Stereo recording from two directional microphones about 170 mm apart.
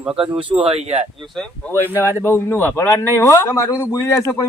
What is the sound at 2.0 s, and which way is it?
Speech, 15° left (ahead or behind).